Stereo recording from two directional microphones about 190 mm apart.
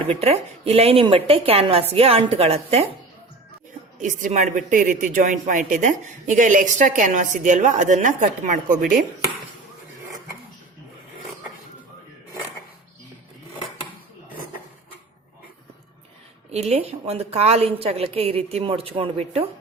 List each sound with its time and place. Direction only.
0.2 s a woman's voice: 30° right (ahead or behind)
4.0 s a woman's voice: 40° right (ahead or behind)
16.5 s a woman's voice: 35° right (ahead or behind)